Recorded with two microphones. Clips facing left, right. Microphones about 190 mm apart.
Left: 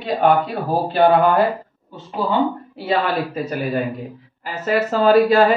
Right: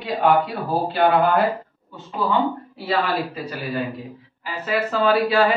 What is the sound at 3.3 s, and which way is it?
Speech, 45° left (ahead or behind).